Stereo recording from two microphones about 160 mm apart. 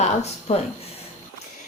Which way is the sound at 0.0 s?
40° left (ahead or behind).